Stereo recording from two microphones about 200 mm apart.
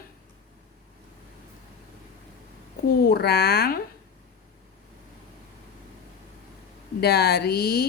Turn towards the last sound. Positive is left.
turn(degrees=50)  # may be behind; listen again after turning